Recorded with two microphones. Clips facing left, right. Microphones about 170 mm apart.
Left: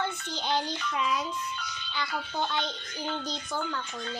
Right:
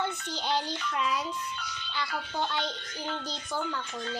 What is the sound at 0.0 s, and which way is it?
A child's voice, 10° right (ahead or behind).